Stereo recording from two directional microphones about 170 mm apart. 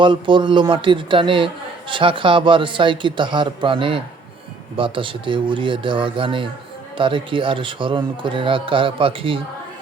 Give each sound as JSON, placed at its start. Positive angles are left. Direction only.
{"t": 0.0, "sound": "speech", "side_deg": -30}